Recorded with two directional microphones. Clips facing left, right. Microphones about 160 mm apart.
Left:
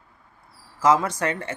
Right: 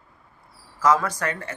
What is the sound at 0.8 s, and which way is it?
Speech, 20° left (ahead or behind).